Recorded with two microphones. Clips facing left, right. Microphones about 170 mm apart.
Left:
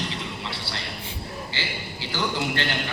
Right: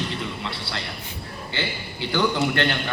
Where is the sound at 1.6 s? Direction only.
55° right (ahead or behind).